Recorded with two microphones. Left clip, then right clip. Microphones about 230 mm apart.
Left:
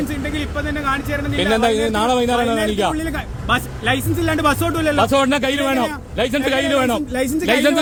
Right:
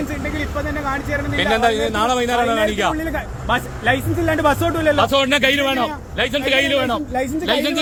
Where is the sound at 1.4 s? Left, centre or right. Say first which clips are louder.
Even; left.